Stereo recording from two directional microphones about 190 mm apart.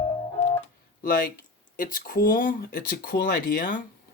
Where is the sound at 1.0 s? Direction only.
50° left (ahead or behind).